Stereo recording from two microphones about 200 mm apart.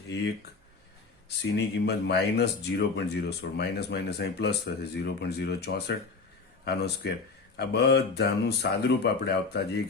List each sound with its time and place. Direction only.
1.5 s speech: 55° left (ahead or behind)